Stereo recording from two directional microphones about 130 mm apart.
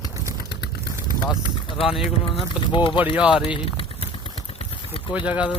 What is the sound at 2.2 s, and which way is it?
Speech, 40° left (ahead or behind).